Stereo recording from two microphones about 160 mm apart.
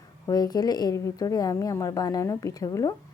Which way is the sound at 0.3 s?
25° left (ahead or behind).